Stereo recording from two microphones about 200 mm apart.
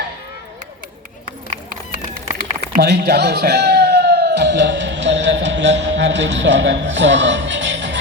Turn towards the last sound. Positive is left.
turn(degrees=-65)  # may be behind; listen again after turning